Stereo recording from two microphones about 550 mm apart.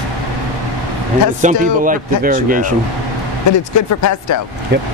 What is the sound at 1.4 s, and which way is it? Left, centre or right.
A man's voice, centre.